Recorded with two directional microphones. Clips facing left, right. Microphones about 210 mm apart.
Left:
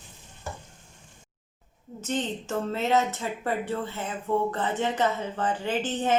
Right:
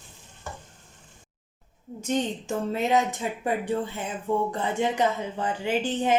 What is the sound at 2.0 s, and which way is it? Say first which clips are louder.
A woman's voice: right 3 dB; 15° right (ahead or behind).